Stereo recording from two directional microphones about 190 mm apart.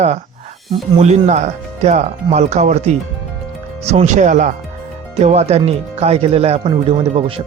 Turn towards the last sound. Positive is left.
turn(degrees=-30)  # may be behind; listen again after turning